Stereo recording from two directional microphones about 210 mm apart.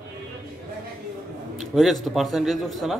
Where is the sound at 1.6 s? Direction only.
Centre (ahead or behind).